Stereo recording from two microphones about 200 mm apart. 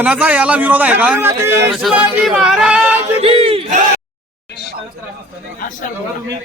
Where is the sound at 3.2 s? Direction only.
30° right (ahead or behind).